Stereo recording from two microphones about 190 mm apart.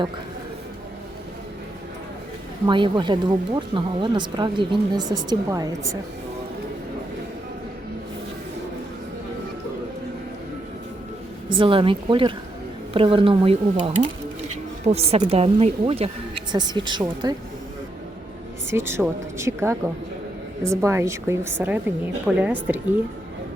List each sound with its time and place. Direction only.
2.6 s speech: 25° right (ahead or behind)
11.5 s speech: 25° right (ahead or behind)
18.7 s a woman's voice: 15° right (ahead or behind)